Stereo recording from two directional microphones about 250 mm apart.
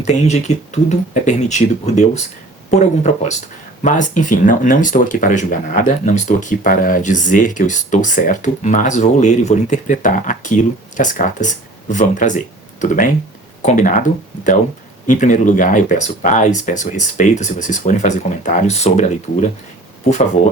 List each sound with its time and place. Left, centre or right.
0.0 s speech: left
13.6 s speech: left
15.0 s speech: left